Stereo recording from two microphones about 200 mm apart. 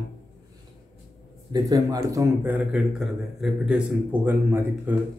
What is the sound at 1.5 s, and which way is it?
A man's voice, 20° right (ahead or behind).